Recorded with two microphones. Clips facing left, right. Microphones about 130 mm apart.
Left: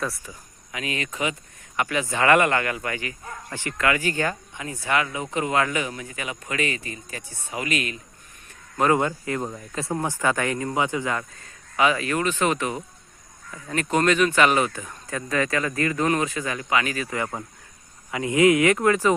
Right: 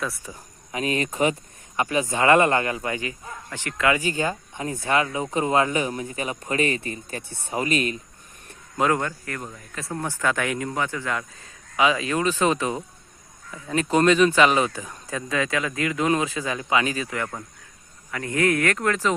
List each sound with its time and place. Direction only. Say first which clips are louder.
0.7 s speech: right 5 dB; 35° right (ahead or behind); by 4.4 s 15° right (ahead or behind)
4.9 s speech: right 1 dB; 30° right (ahead or behind)
9.0 s speech: left 5 dB; 20° left (ahead or behind)
10.0 s speech: even; 15° left (ahead or behind)
10.4 s speech: left 1 dB; centre (ahead or behind)
10.8 s speech: left 3 dB; 15° left (ahead or behind)
11.8 s speech: even; 20° right (ahead or behind)
16.4 s speech: right 1 dB; 20° right (ahead or behind)
17.2 s speech: left 1 dB; 15° left (ahead or behind)